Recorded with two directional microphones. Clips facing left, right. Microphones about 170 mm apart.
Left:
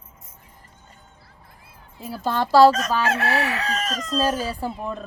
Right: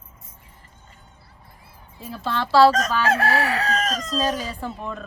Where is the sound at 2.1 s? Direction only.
40° left (ahead or behind).